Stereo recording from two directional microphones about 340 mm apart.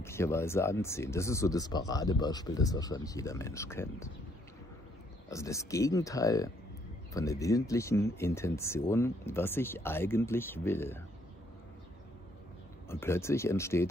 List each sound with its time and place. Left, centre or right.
0.0 s speech: centre
5.3 s speech: centre
12.8 s speech: centre